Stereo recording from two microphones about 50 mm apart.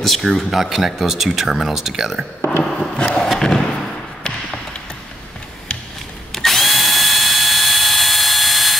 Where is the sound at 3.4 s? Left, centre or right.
Centre.